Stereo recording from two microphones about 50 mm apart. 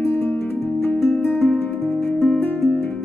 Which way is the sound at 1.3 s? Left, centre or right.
Centre.